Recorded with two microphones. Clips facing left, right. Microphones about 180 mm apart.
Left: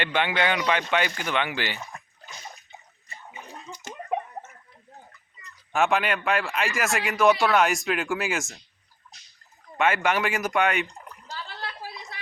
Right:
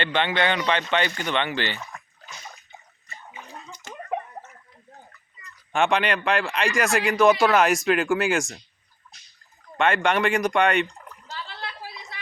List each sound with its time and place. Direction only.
0.0 s speech: 10° left (ahead or behind)
3.3 s bathtub: 20° left (ahead or behind)
5.7 s speech: centre (ahead or behind)
9.7 s speech: 5° left (ahead or behind)
10.8 s a sound: 15° left (ahead or behind)